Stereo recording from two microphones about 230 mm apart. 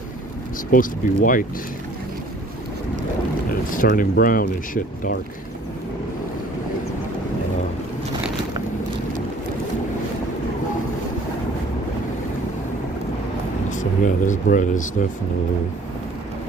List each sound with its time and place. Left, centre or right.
0.7 s speech: left
3.7 s speech: left
13.7 s speech: left